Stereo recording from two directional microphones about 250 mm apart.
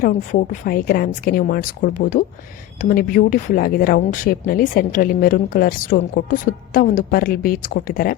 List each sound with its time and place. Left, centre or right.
0.0 s speech: left